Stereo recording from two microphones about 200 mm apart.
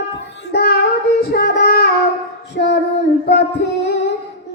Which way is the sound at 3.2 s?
55° left (ahead or behind).